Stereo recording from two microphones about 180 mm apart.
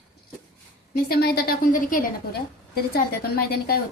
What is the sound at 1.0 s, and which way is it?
A woman's voice, 60° left (ahead or behind).